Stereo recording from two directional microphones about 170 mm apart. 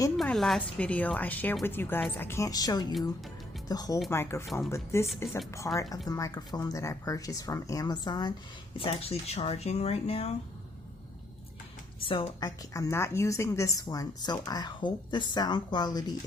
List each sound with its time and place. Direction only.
0.2 s a woman's voice: centre (ahead or behind); by 10.3 s 35° left (ahead or behind)
11.9 s a woman's voice: 30° left (ahead or behind)